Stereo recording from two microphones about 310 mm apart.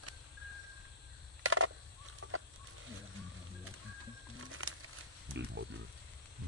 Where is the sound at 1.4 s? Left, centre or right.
Right.